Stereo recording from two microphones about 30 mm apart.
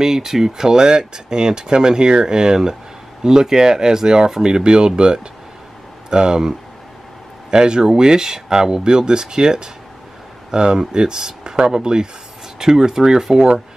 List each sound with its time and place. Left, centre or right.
0.0 s speech: centre
7.5 s speech: right